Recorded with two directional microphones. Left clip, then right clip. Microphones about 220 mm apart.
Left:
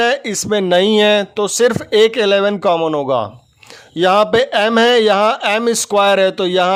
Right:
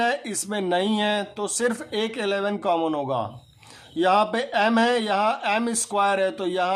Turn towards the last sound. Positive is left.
turn(degrees=40)  # may be behind; listen again after turning